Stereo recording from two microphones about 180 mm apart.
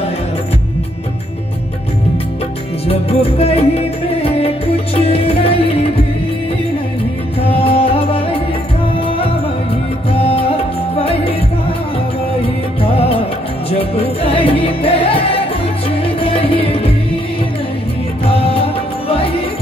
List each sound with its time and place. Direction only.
2.9 s music: 35° left (ahead or behind)
7.4 s music: 30° left (ahead or behind)
10.1 s music: 30° left (ahead or behind)
12.4 s music: 30° left (ahead or behind)
18.3 s music: 30° left (ahead or behind)